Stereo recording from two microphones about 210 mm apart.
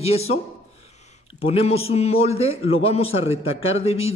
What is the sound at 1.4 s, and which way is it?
A man's voice, 30° left (ahead or behind).